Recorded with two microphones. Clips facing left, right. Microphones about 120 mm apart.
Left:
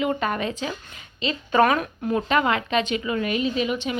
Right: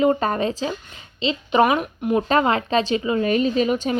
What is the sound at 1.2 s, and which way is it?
Speech, 20° right (ahead or behind).